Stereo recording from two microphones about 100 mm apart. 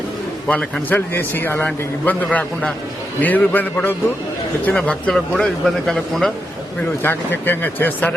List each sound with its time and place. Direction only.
0.4 s a man's voice: 15° left (ahead or behind)
7.0 s speech: 20° left (ahead or behind)